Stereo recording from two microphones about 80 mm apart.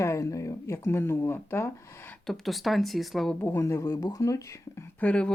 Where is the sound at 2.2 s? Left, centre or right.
Centre.